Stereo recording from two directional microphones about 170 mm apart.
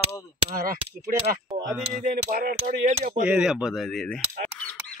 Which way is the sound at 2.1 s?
60° right (ahead or behind).